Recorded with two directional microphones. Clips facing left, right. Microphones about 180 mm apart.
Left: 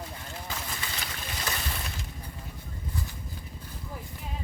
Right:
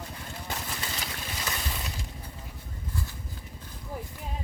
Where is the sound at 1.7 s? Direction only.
15° right (ahead or behind).